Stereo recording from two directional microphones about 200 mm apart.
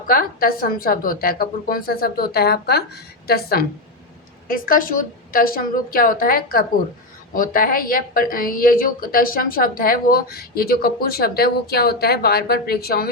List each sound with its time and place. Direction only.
0.1 s a woman's voice: 45° left (ahead or behind)